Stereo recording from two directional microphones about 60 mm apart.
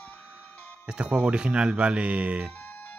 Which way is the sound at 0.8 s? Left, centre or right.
Centre.